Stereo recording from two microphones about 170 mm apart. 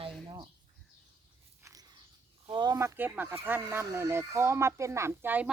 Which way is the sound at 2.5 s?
25° right (ahead or behind).